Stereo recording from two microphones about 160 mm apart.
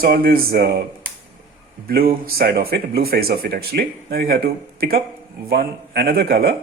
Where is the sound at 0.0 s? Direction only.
75° right (ahead or behind).